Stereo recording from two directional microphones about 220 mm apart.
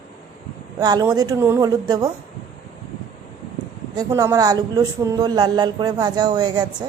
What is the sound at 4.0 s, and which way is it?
A man's voice, 15° right (ahead or behind).